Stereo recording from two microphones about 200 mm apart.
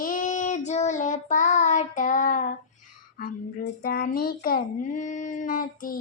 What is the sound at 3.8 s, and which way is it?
Speech, 50° left (ahead or behind).